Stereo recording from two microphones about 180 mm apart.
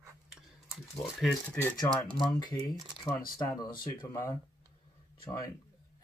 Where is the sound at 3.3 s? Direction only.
20° left (ahead or behind).